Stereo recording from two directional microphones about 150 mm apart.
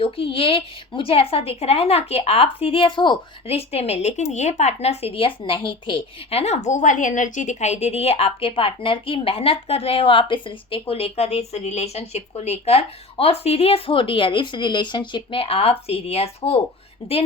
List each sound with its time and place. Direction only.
0.0 s a woman's voice: 35° left (ahead or behind)